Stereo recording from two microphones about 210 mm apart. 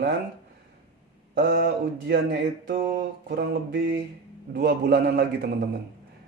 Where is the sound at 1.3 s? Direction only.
55° right (ahead or behind).